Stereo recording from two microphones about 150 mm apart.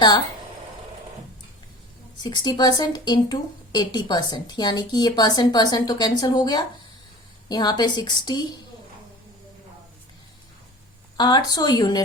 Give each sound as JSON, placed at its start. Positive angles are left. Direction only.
{"t": 2.1, "sound": "speech", "side_deg": 30}
{"t": 11.2, "sound": "speech", "side_deg": 30}